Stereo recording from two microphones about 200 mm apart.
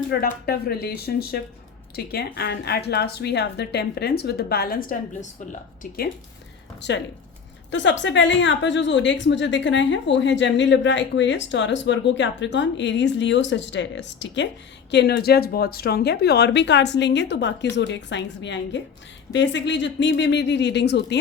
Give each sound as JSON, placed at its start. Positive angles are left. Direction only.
{"t": 0.1, "sound": "speech", "side_deg": 50}
{"t": 6.8, "sound": "a woman's voice", "side_deg": 60}